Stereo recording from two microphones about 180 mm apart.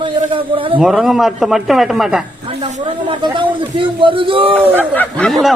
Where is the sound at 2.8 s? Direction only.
25° right (ahead or behind).